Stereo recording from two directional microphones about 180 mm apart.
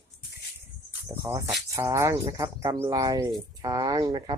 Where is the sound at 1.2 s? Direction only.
15° right (ahead or behind).